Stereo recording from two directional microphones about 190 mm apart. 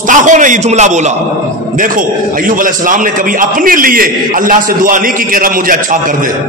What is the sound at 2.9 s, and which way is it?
A man's voice, 45° right (ahead or behind).